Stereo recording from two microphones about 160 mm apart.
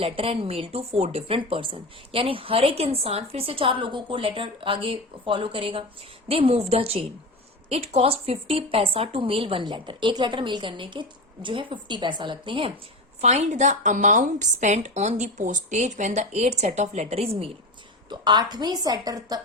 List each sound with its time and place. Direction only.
0.0 s a woman's voice: 35° right (ahead or behind)
13.2 s speech: 50° right (ahead or behind)
18.1 s a woman's voice: 25° right (ahead or behind)